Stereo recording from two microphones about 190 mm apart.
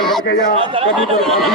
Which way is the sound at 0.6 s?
25° right (ahead or behind).